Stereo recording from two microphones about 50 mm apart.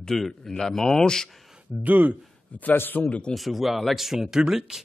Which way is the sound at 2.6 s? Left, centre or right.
Left.